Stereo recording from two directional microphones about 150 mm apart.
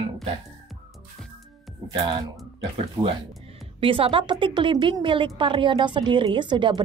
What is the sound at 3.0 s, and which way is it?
A woman's voice, 30° right (ahead or behind).